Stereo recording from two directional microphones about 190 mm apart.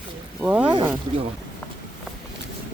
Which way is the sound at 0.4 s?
5° right (ahead or behind).